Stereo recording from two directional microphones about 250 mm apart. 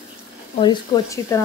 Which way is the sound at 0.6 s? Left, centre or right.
Centre.